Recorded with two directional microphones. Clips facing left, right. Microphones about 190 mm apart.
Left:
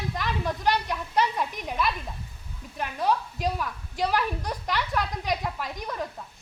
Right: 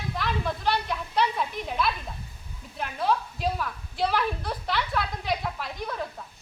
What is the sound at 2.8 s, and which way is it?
A woman's voice, 15° left (ahead or behind).